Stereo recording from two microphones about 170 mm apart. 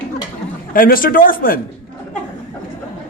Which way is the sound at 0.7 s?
55° left (ahead or behind).